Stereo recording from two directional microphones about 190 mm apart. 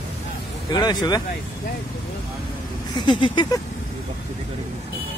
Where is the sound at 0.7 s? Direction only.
20° left (ahead or behind).